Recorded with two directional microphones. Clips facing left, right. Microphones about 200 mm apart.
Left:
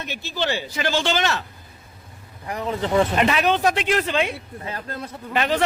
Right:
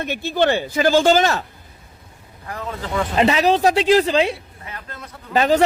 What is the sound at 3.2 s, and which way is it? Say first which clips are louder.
Speech: right 4 dB; 30° right (ahead or behind).